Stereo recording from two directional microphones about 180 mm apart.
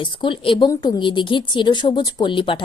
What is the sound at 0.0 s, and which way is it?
A woman's voice, 25° left (ahead or behind).